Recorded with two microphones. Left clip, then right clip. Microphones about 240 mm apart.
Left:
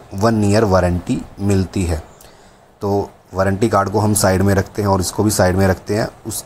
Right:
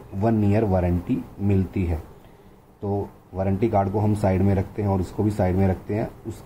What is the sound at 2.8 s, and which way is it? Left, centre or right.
Speech, left.